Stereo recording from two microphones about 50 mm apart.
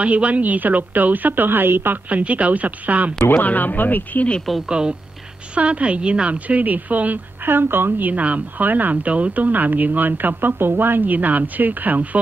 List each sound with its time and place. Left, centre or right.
0.0 s speech: right
2.0 s a woman's voice: right
3.3 s speech: left
4.6 s a woman's voice: centre; by 7.2 s right
7.4 s a woman's voice: right
8.1 s speech: right